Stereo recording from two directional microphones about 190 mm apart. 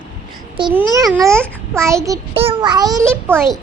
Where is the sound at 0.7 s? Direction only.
15° right (ahead or behind).